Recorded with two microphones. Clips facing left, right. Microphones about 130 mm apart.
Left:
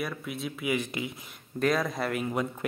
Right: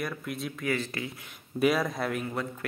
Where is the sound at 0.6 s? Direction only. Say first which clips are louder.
Left 1 dB; 15° left (ahead or behind).